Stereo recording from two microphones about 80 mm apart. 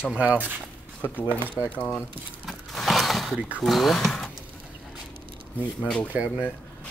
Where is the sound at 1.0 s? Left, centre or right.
Left.